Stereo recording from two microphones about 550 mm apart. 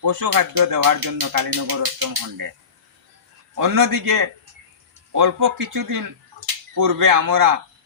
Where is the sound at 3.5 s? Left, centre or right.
Right.